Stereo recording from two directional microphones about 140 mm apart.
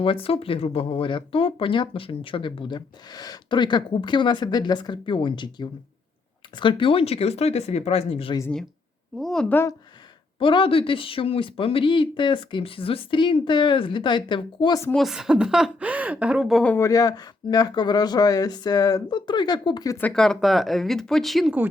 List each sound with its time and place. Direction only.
0.0 s speech: 40° left (ahead or behind)
9.1 s speech: 5° left (ahead or behind)
10.4 s speech: 35° left (ahead or behind)
14.9 s speech: centre (ahead or behind)
16.7 s speech: 25° left (ahead or behind)
20.0 s speech: 5° left (ahead or behind)